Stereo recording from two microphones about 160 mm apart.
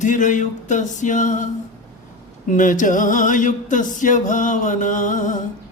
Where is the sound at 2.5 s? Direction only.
55° left (ahead or behind).